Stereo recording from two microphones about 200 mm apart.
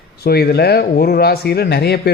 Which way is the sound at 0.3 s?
50° left (ahead or behind).